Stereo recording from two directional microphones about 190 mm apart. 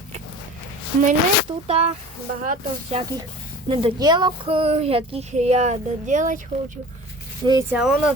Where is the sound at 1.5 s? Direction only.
30° right (ahead or behind).